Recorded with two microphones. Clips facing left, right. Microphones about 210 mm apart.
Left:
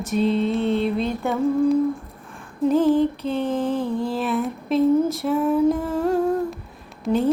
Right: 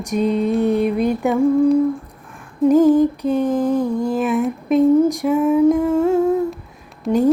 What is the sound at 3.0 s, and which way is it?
Mantra, 45° right (ahead or behind).